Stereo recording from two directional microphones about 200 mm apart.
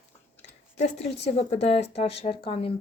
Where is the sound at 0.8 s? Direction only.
30° left (ahead or behind).